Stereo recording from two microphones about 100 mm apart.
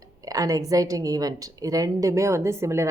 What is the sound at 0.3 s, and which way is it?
Speech, 35° right (ahead or behind).